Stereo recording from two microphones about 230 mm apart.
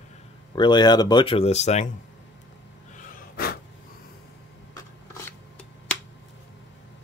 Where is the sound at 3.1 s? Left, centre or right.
Left.